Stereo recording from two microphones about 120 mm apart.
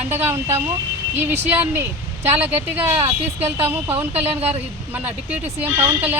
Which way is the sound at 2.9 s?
60° right (ahead or behind).